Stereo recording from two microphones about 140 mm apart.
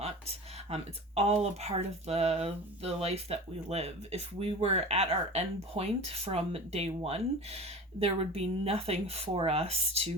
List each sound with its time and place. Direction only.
0.0 s speech: 45° right (ahead or behind)